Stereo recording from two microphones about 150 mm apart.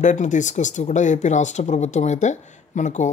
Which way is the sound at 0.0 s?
55° left (ahead or behind).